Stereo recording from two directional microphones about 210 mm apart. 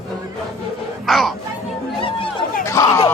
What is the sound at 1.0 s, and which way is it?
Chatter, centre (ahead or behind).